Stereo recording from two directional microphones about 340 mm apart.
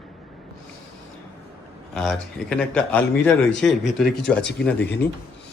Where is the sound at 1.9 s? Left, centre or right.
Centre.